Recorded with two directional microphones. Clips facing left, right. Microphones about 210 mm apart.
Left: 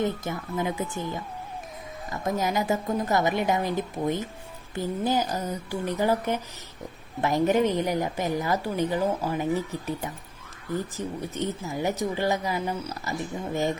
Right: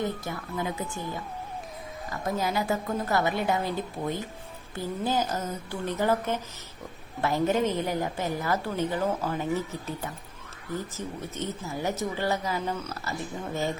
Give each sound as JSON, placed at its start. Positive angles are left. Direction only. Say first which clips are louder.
{"t": 0.0, "sound": "speech", "louder": "left 3 dB", "side_deg": 20}
{"t": 2.2, "sound": "a woman's voice", "louder": "left 2 dB", "side_deg": 20}